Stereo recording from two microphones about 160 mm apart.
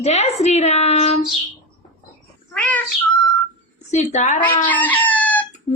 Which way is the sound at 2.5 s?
10° left (ahead or behind).